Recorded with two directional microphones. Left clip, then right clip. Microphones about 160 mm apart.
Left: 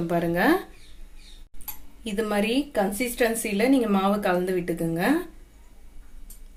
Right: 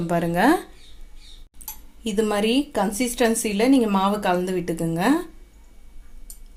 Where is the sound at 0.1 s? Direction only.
55° right (ahead or behind).